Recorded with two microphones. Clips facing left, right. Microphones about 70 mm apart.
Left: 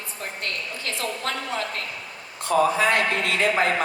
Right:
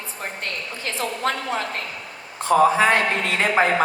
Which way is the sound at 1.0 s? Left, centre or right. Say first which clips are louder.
Right 5 dB; right.